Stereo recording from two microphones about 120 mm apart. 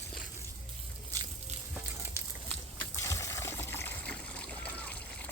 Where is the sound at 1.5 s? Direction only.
70° right (ahead or behind).